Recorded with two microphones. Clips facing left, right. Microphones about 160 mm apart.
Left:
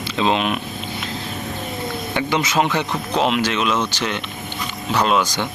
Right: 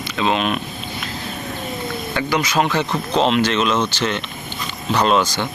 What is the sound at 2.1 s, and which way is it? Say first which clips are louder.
Speech: even; 20° left (ahead or behind).